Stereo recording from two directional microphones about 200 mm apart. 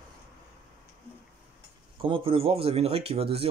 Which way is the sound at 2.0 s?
25° right (ahead or behind).